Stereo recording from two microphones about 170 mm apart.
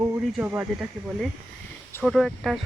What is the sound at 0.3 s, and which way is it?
Speech, 10° right (ahead or behind).